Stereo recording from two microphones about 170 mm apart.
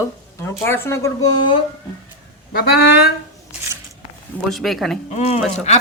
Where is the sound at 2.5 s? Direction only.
65° left (ahead or behind).